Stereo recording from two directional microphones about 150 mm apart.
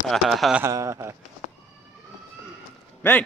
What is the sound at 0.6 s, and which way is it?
Speech, 20° right (ahead or behind).